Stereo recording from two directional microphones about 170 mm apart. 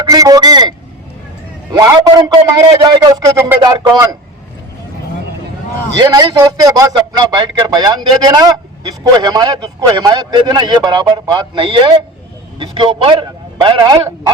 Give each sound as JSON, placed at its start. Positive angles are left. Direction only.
{"t": 0.0, "sound": "a man's voice", "side_deg": -20}
{"t": 1.7, "sound": "a man's voice", "side_deg": -15}
{"t": 6.0, "sound": "a man's voice", "side_deg": -25}